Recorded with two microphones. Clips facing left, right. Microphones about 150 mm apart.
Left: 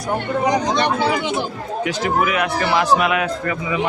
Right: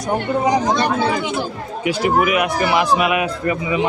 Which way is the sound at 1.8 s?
10° right (ahead or behind).